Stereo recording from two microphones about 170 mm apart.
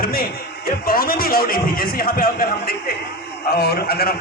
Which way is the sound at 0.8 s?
60° left (ahead or behind).